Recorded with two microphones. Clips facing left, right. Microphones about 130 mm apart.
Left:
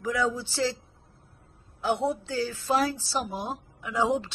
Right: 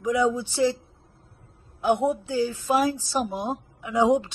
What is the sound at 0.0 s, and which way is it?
Speech, 20° right (ahead or behind).